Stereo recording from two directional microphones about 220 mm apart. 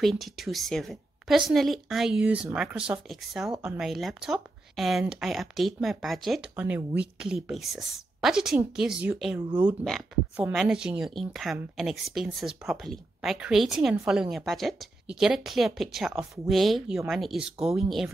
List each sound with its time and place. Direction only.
0.0 s speech: centre (ahead or behind)
9.5 s speech: 20° right (ahead or behind)
9.8 s speech: centre (ahead or behind)